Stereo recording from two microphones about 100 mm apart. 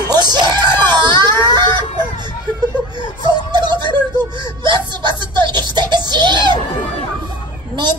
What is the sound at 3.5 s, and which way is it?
Whimper, 45° right (ahead or behind).